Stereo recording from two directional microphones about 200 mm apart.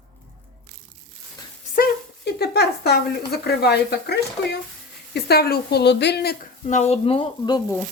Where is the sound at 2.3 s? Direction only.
55° left (ahead or behind).